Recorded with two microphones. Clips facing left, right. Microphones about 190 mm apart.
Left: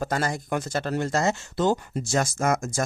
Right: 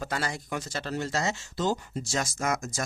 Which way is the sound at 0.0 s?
45° left (ahead or behind).